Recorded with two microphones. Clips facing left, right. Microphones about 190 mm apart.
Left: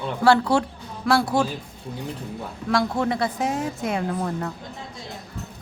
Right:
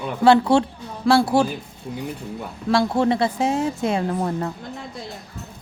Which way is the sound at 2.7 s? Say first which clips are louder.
Right 4 dB; 30° right (ahead or behind).